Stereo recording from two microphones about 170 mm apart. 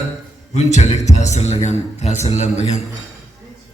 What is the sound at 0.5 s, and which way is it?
A man's voice, 40° left (ahead or behind).